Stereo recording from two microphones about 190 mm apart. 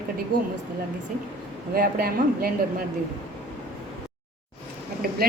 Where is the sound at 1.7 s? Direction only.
50° right (ahead or behind).